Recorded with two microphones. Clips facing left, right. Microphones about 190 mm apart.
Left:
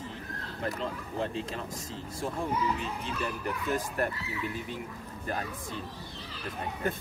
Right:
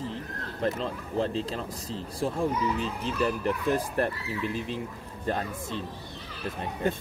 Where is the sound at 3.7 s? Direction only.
30° right (ahead or behind).